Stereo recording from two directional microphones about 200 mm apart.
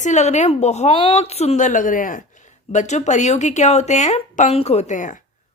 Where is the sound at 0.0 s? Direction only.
35° left (ahead or behind).